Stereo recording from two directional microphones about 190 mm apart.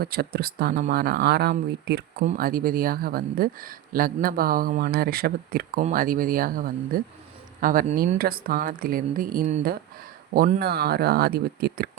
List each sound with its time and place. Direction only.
0.0 s speech: 55° right (ahead or behind)
2.2 s speech: 45° right (ahead or behind)